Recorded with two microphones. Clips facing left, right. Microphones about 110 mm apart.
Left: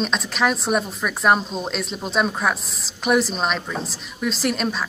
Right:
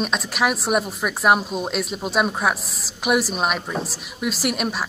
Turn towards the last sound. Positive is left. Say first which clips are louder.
# left 1 dB
turn(degrees=-10)  # may be behind; listen again after turning